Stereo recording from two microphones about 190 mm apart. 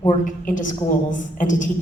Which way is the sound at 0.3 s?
40° left (ahead or behind).